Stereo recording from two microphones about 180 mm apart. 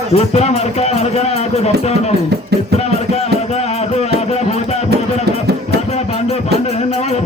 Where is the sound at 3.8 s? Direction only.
35° left (ahead or behind).